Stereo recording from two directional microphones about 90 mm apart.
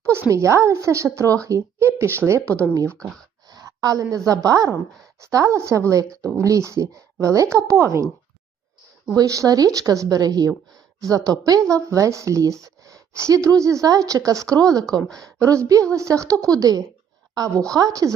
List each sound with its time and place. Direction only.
0.0 s speech: 30° right (ahead or behind)
3.5 s a sound: 40° right (ahead or behind)
4.3 s speech: 40° right (ahead or behind)
6.1 s speech: 15° left (ahead or behind)
6.4 s speech: 35° right (ahead or behind)
9.1 s speech: 40° right (ahead or behind)
14.9 s speech: 10° left (ahead or behind)
15.4 s speech: 40° right (ahead or behind)